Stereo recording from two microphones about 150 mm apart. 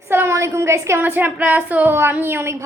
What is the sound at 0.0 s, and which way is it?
Speech, 15° right (ahead or behind).